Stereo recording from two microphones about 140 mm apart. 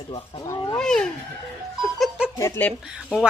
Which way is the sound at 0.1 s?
30° left (ahead or behind).